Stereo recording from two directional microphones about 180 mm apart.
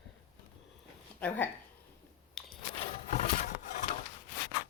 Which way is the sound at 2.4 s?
Centre (ahead or behind).